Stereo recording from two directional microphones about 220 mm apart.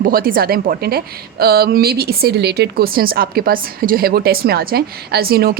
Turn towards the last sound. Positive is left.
turn(degrees=-45)  # may be behind; listen again after turning